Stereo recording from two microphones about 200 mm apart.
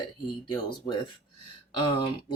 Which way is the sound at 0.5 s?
25° left (ahead or behind).